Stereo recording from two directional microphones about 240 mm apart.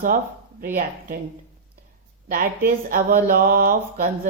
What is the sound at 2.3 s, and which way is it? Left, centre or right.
Speech, right.